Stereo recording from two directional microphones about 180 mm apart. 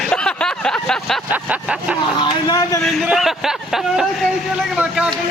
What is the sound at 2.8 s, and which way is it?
Speech, centre (ahead or behind).